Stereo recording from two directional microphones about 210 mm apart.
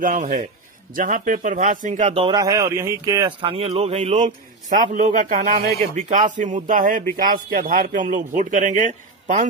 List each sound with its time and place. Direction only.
0.0 s a man's voice: 40° right (ahead or behind)